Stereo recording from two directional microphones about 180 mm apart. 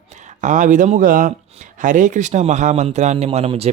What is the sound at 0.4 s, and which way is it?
A man's voice, 45° right (ahead or behind).